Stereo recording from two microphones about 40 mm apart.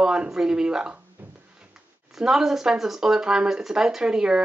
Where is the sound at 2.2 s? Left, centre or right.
Centre.